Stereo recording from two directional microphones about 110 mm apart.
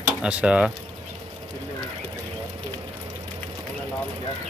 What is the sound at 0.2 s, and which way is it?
Speech, 10° right (ahead or behind).